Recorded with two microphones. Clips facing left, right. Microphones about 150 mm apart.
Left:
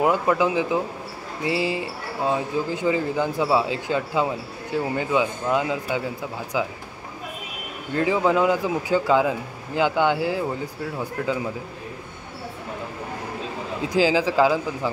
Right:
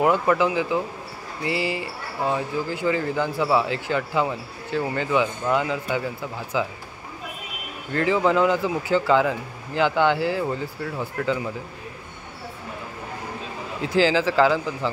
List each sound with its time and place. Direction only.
0.0 s speech: 15° left (ahead or behind)
7.9 s speech: 10° left (ahead or behind)
13.8 s speech: 15° left (ahead or behind)